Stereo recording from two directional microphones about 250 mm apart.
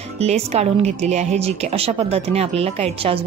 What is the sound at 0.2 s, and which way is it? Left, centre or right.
Speech, right.